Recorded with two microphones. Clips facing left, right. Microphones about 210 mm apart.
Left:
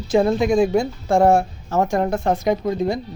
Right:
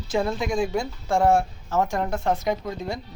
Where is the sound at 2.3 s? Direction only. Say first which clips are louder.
Left 3 dB; 15° left (ahead or behind).